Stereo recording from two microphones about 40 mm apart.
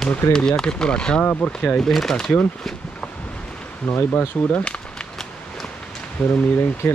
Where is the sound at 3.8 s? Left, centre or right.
Left.